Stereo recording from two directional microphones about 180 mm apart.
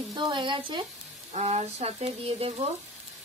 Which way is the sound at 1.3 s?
40° right (ahead or behind).